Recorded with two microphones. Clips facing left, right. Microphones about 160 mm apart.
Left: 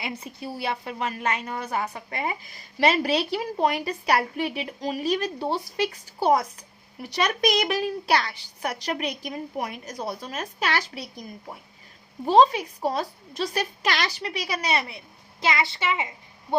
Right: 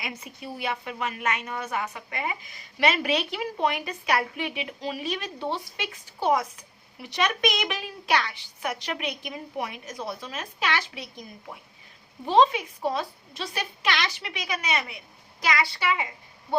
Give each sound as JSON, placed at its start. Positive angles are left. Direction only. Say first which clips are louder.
{"t": 0.0, "sound": "a woman's voice", "louder": "left 3 dB", "side_deg": 30}